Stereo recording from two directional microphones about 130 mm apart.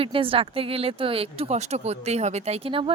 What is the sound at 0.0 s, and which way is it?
Speech, 45° right (ahead or behind).